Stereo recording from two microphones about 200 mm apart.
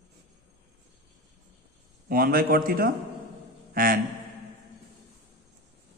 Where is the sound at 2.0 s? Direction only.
45° right (ahead or behind).